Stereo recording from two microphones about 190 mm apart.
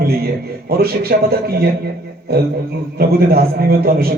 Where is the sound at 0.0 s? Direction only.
55° right (ahead or behind).